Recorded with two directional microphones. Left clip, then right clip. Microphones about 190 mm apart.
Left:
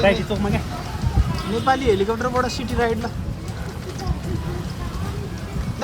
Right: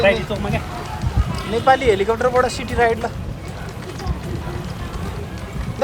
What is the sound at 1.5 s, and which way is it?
Speech, 30° left (ahead or behind).